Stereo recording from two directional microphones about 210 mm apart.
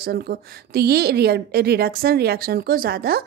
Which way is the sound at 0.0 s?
45° right (ahead or behind).